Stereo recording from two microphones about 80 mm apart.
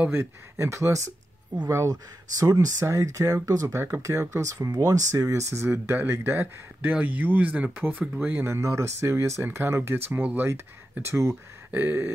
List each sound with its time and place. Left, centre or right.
0.1 s speech: right
4.0 s speech: right
11.7 s a sound: right